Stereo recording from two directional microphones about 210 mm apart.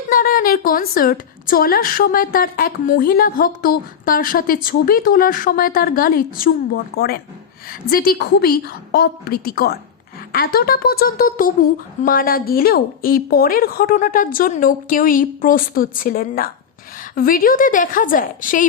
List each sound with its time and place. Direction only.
0.1 s a woman's voice: 40° left (ahead or behind)